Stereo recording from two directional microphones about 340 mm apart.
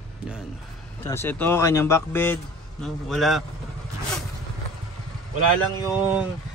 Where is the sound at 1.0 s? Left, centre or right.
Centre.